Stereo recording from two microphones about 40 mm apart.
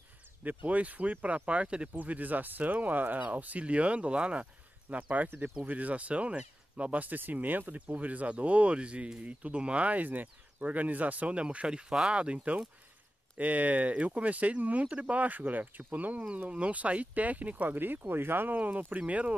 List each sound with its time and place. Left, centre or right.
0.4 s speech: right
2.0 s speech: right
5.0 s speech: right
13.4 s speech: right
16.4 s speech: right
17.7 s speech: right
18.6 s speech: right